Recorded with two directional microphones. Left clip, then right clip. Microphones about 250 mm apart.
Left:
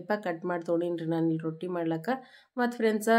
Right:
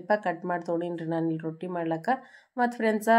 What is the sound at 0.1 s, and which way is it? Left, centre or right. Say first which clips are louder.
Speech: right 4 dB; centre.